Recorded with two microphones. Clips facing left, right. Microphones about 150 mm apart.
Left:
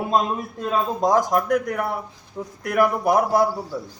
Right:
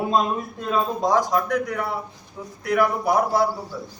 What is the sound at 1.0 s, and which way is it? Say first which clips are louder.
Speech: left 3 dB; 45° left (ahead or behind).